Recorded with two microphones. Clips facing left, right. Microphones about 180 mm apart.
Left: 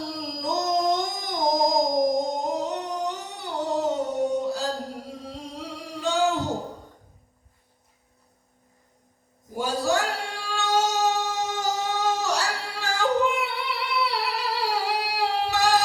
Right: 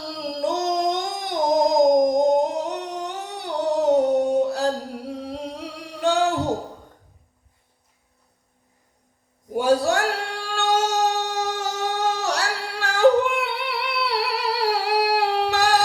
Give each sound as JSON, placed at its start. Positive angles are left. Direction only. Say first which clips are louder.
{"t": 0.2, "sound": "singing", "louder": "right 6 dB", "side_deg": -60}
{"t": 3.8, "sound": "a sound", "louder": "right 8 dB", "side_deg": -60}
{"t": 5.0, "sound": "singing", "louder": "right 7 dB", "side_deg": -60}
{"t": 9.5, "sound": "singing", "louder": "right 6 dB", "side_deg": -65}